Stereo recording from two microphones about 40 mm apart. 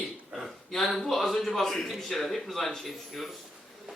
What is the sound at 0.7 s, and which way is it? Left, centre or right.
A man's voice, centre.